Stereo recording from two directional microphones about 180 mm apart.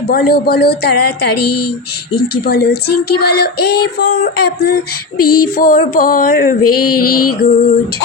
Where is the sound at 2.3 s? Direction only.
60° left (ahead or behind).